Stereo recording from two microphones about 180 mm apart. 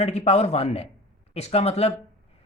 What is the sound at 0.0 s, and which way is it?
Speech, 40° left (ahead or behind).